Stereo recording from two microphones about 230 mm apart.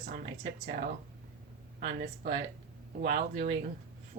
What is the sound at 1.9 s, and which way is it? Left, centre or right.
Speech, right.